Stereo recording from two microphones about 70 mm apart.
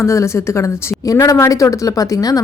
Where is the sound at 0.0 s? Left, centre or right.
Left.